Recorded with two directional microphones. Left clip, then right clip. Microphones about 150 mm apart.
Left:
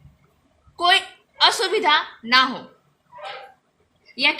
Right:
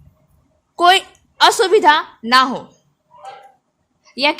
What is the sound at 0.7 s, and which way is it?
A woman's voice, 65° right (ahead or behind).